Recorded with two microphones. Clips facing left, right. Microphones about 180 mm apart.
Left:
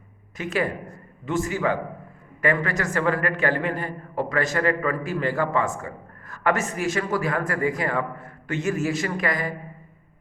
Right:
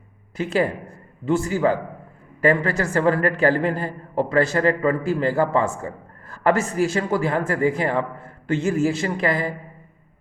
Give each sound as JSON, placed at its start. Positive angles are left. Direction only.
{"t": 0.3, "sound": "a man's voice", "side_deg": -30}